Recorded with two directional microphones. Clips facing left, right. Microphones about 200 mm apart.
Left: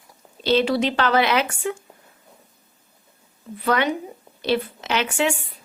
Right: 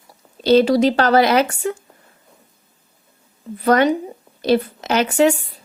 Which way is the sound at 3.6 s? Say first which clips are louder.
Right 7 dB; 40° right (ahead or behind).